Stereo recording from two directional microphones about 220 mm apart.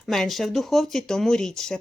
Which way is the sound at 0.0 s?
Centre (ahead or behind).